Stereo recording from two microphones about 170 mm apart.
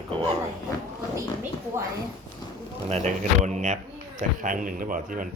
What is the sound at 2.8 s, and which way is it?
A man's voice, 45° right (ahead or behind).